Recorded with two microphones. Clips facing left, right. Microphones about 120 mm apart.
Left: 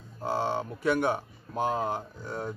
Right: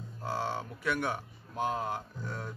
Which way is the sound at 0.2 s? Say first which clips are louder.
Left 5 dB; 25° left (ahead or behind).